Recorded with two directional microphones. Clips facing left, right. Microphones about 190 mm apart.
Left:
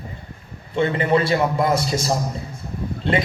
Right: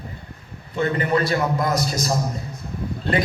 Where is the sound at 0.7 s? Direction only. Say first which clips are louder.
Left 2 dB; 25° left (ahead or behind).